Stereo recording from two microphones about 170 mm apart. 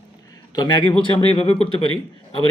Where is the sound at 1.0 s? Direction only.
35° left (ahead or behind).